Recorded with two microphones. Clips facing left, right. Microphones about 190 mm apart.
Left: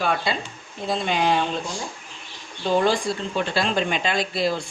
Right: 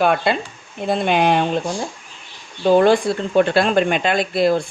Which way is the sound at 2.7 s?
55° right (ahead or behind).